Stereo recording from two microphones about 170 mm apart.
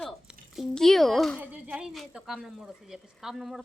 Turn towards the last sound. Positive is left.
turn(degrees=0)  # may be behind; listen again after turning